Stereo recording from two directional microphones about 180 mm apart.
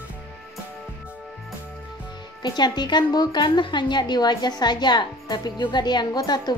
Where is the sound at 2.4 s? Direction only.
25° left (ahead or behind).